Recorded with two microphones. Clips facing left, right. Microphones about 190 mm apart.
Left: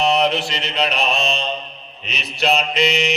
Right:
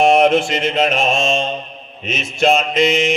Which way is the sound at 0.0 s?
50° right (ahead or behind).